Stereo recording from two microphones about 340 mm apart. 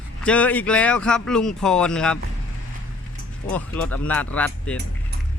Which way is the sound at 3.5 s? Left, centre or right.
Centre.